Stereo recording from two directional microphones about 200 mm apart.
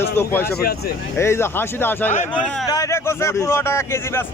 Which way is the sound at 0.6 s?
50° left (ahead or behind).